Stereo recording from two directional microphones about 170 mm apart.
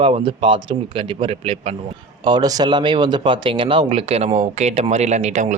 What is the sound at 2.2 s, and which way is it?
Speech, 25° right (ahead or behind).